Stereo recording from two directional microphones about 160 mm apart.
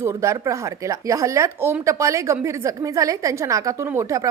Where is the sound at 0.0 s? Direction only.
20° right (ahead or behind).